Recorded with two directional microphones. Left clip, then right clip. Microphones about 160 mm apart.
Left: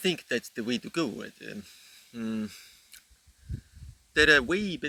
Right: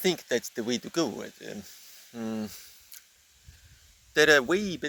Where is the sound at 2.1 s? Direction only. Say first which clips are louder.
Even; 25° left (ahead or behind).